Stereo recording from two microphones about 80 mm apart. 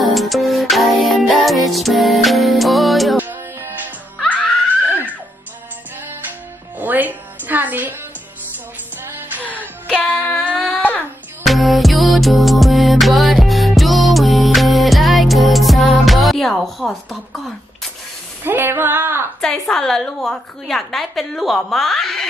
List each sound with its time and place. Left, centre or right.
0.0 s music: centre
3.2 s music: right
6.8 s music: right
9.0 s music: right
9.5 s wail: left
11.4 s music: centre
18.4 s female singing: right
19.4 s a woman's voice: centre